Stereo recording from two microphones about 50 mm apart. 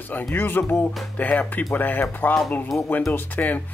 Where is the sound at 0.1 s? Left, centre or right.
Left.